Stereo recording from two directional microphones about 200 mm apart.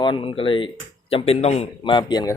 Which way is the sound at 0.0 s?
25° left (ahead or behind).